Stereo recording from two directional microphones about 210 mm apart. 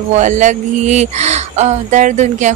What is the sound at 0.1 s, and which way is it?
Speech, 35° right (ahead or behind).